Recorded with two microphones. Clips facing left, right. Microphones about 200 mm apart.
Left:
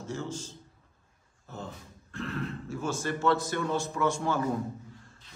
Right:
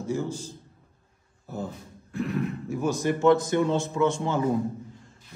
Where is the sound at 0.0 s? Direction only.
15° right (ahead or behind).